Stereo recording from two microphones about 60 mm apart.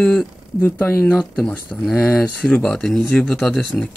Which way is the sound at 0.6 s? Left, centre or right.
Left.